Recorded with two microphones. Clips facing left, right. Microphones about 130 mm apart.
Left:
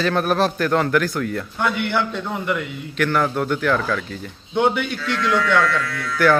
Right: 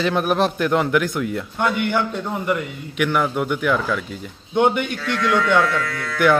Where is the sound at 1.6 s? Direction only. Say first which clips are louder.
Right 2 dB; 45° right (ahead or behind).